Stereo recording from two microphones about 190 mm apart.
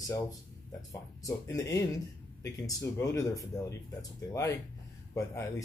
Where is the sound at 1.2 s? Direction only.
15° left (ahead or behind).